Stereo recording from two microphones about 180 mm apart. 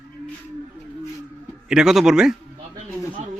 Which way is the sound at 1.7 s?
5° right (ahead or behind).